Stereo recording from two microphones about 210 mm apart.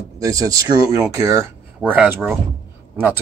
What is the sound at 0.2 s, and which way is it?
Speech, 15° right (ahead or behind).